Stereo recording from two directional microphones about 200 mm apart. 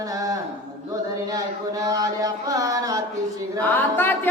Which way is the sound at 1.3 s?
15° right (ahead or behind).